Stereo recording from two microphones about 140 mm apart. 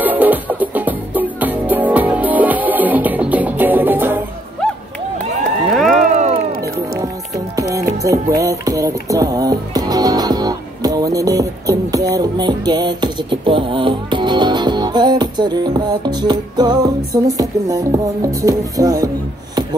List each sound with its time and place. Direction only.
0.0 s music: 10° right (ahead or behind)
5.7 s a sound: centre (ahead or behind)
6.1 s music: 55° right (ahead or behind)
7.0 s music: 25° right (ahead or behind)